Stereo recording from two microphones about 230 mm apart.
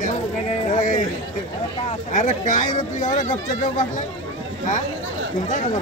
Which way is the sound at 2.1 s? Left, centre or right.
Left.